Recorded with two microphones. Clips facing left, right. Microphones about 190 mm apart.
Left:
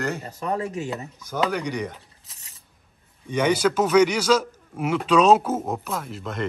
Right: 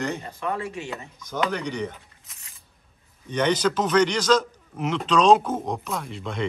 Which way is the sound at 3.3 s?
10° left (ahead or behind).